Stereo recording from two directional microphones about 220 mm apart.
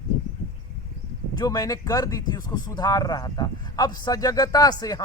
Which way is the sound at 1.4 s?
15° left (ahead or behind).